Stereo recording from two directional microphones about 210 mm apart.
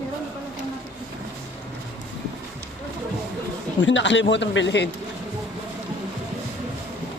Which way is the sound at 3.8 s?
60° left (ahead or behind).